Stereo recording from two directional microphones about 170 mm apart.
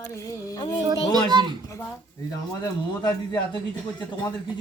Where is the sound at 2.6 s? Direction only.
25° left (ahead or behind).